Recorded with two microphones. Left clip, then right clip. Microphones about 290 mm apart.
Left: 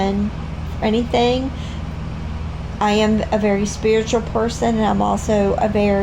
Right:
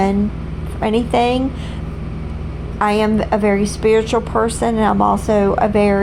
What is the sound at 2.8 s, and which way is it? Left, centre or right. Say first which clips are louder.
A woman's voice: right 1 dB; right.